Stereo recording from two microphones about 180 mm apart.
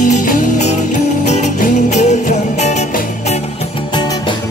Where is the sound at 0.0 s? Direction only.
45° left (ahead or behind).